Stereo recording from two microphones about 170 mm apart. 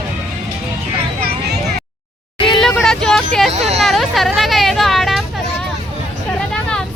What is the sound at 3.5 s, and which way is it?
Speech, 40° right (ahead or behind).